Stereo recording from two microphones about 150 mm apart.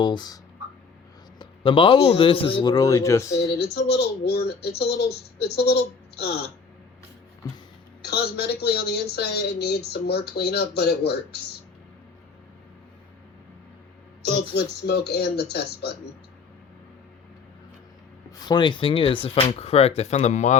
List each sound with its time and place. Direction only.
0.0 s speech: 30° left (ahead or behind)
1.4 s a man's voice: 35° left (ahead or behind)
2.7 s speech: 20° left (ahead or behind)
3.6 s a woman's voice: 90° left
8.1 s speech: 90° left
14.5 s speech: 90° left
18.4 s speech: 30° left (ahead or behind); by 20.6 s 50° left (ahead or behind)